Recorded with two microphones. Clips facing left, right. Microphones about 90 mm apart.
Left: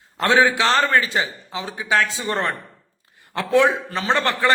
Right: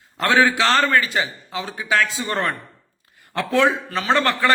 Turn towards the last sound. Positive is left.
turn(degrees=20)  # may be behind; listen again after turning